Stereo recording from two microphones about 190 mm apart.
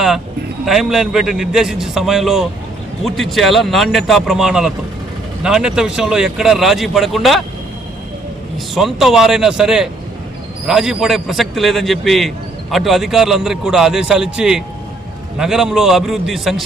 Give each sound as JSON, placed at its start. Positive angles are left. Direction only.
{"t": 0.6, "sound": "speech", "side_deg": 0}
{"t": 8.7, "sound": "speech", "side_deg": 0}